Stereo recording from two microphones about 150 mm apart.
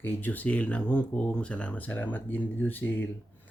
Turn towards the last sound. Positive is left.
turn(degrees=15)  # may be behind; listen again after turning